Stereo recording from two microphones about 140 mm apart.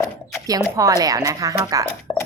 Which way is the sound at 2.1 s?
35° left (ahead or behind).